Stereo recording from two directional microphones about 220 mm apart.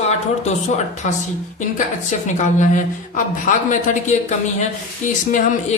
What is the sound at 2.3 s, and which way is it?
A man's voice, 35° left (ahead or behind).